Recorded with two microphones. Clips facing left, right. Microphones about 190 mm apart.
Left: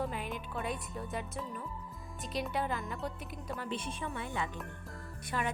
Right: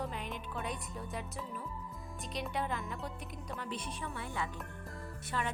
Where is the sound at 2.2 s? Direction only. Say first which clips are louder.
Left 3 dB; centre (ahead or behind).